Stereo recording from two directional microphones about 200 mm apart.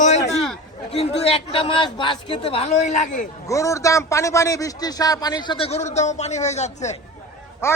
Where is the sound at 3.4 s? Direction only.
15° left (ahead or behind); by 6.9 s 35° left (ahead or behind).